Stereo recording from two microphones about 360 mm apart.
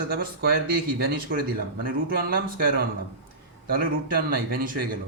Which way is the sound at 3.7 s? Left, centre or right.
Right.